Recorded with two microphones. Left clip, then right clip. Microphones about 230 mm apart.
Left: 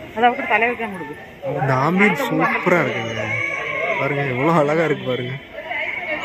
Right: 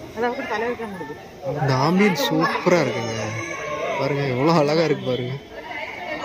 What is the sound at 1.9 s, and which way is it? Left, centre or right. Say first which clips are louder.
Speech: left 2 dB; left.